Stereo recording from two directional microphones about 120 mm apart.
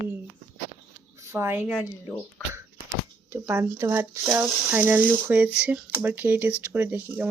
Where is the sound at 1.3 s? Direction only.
20° right (ahead or behind).